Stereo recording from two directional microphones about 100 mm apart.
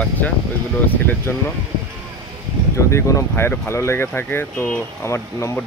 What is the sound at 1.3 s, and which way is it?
Speech, 20° left (ahead or behind).